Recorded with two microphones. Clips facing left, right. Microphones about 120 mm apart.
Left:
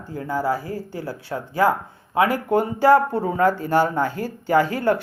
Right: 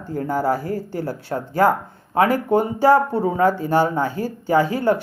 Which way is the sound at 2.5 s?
15° right (ahead or behind).